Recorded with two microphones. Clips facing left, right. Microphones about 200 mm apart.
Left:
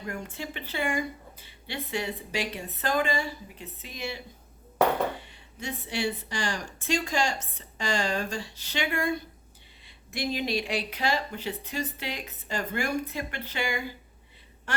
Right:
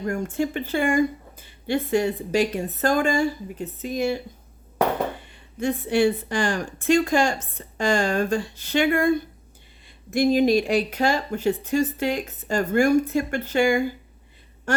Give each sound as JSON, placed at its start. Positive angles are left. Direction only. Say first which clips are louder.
{"t": 0.0, "sound": "speech", "louder": "right 11 dB", "side_deg": -45}
{"t": 5.2, "sound": "speech", "louder": "right 13 dB", "side_deg": -50}
{"t": 14.7, "sound": "a sound", "louder": "right 9 dB", "side_deg": -45}